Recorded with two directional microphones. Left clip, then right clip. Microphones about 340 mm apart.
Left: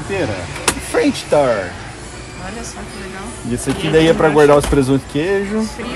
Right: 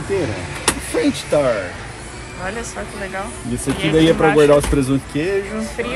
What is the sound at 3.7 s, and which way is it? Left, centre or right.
Speech, centre.